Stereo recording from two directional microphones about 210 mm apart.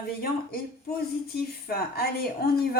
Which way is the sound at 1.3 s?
45° left (ahead or behind).